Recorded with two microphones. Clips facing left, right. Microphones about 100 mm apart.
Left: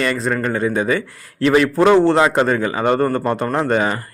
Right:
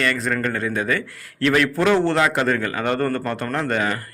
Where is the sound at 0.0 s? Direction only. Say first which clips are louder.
Left 3 dB; 25° left (ahead or behind).